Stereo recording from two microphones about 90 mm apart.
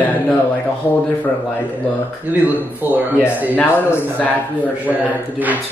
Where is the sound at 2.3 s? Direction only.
20° right (ahead or behind).